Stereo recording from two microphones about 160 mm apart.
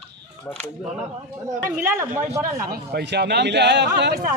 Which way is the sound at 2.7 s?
85° right.